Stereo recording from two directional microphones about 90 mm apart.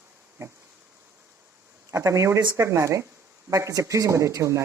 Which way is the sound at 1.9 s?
35° right (ahead or behind).